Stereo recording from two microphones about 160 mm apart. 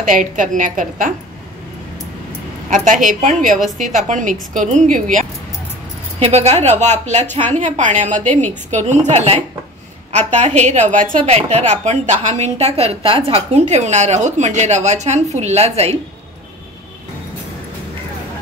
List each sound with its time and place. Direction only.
0.0 s a woman's voice: 55° right (ahead or behind)
2.7 s a woman's voice: 50° right (ahead or behind)
6.1 s a woman's voice: 40° right (ahead or behind)
11.2 s a woman's voice: 45° right (ahead or behind)